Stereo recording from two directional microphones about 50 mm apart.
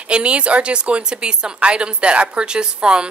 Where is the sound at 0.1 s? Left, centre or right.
Right.